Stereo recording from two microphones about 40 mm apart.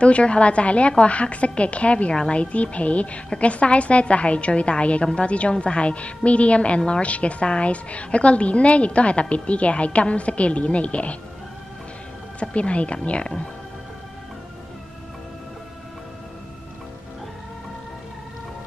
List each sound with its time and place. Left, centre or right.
0.0 s a woman's voice: left
12.4 s a woman's voice: left